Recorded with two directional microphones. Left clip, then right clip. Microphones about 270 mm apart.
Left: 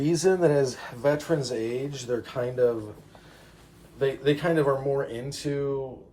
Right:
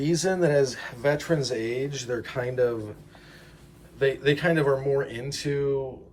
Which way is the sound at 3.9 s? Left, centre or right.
Centre.